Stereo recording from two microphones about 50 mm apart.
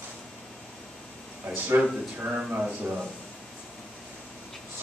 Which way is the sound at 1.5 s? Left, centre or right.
Right.